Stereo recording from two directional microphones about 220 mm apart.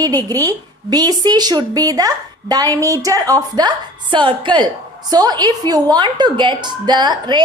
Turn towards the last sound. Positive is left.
turn(degrees=-20)  # may be behind; listen again after turning